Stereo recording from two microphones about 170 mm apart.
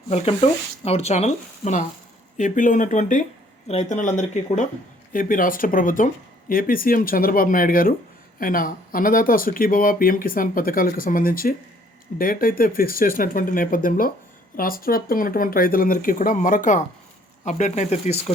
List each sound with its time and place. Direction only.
0.1 s speech: 35° left (ahead or behind)